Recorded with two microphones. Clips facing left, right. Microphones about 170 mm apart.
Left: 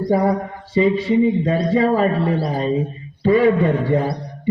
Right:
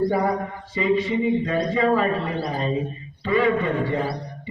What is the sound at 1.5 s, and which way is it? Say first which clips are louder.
Speech: left 4 dB; 35° left (ahead or behind).